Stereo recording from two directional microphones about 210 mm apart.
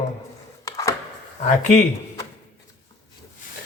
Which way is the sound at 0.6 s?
15° left (ahead or behind).